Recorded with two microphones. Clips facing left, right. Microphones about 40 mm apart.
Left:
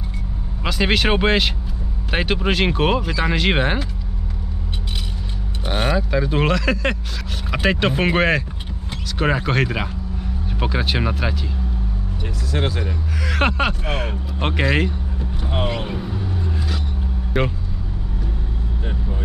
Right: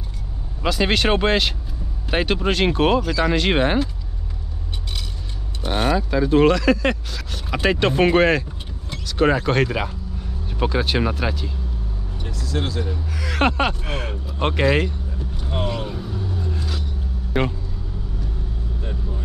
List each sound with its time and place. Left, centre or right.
0.7 s speech: centre
5.6 s speech: centre
12.4 s speech: left
13.2 s speech: centre
14.9 s vehicle: left
17.3 s speech: centre
18.9 s vehicle: left